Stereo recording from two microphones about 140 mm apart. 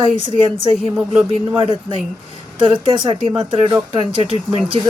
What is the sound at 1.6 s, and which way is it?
Speech, 40° right (ahead or behind).